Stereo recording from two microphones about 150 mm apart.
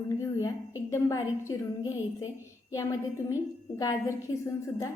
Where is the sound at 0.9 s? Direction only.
20° left (ahead or behind).